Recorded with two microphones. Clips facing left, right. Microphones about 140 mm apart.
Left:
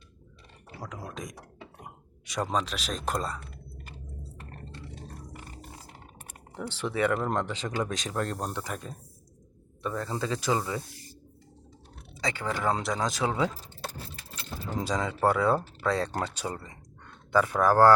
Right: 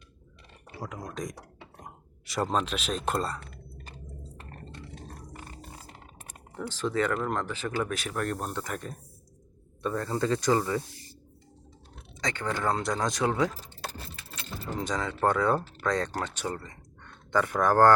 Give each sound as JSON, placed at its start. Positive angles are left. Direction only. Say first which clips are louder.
{"t": 0.9, "sound": "speech", "louder": "right 3 dB", "side_deg": 5}
{"t": 6.8, "sound": "speech", "louder": "left 1 dB", "side_deg": 10}
{"t": 12.2, "sound": "speech", "louder": "even", "side_deg": 10}
{"t": 13.9, "sound": "a sound", "louder": "even", "side_deg": -90}
{"t": 14.8, "sound": "speech", "louder": "left 1 dB", "side_deg": 15}